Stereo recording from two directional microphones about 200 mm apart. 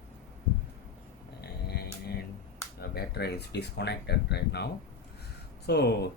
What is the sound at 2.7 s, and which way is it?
Speech, 55° left (ahead or behind).